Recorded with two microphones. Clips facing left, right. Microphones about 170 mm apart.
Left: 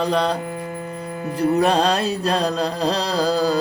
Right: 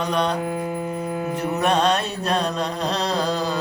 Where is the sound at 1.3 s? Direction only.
30° left (ahead or behind).